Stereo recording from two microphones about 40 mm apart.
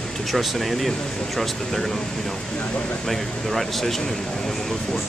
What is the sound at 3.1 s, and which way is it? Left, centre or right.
Speech, centre.